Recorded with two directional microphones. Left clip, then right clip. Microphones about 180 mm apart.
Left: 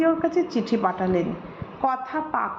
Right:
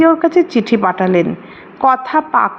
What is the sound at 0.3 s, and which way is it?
A woman's voice, 30° right (ahead or behind).